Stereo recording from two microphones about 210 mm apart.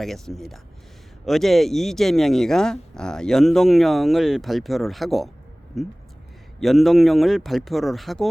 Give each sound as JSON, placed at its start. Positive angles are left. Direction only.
{"t": 0.0, "sound": "speech", "side_deg": 0}